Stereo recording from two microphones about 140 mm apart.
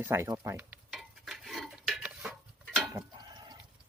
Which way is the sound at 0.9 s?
Centre (ahead or behind).